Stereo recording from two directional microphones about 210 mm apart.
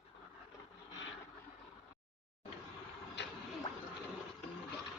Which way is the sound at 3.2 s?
55° left (ahead or behind).